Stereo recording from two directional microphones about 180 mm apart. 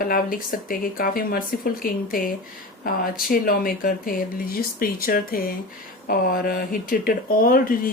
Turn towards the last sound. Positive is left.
turn(degrees=50)  # may be behind; listen again after turning